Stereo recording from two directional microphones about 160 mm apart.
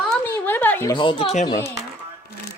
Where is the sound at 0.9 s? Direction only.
35° left (ahead or behind).